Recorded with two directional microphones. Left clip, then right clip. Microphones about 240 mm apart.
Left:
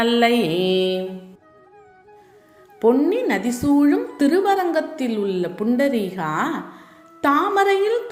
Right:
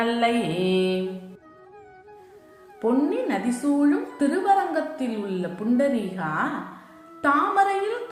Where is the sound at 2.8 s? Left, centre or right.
Left.